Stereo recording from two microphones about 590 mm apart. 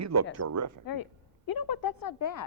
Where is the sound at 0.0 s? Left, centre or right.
Right.